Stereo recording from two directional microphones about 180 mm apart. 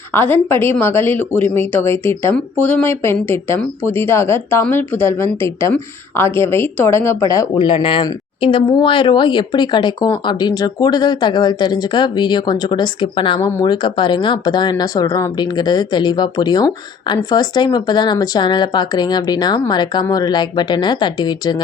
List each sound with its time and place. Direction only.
0.1 s speech: 10° left (ahead or behind)